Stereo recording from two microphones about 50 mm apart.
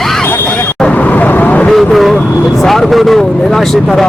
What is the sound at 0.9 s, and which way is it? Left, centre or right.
Vehicle, left.